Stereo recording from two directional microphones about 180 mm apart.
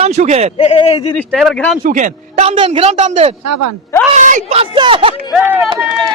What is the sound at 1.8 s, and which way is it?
Speech, 50° right (ahead or behind).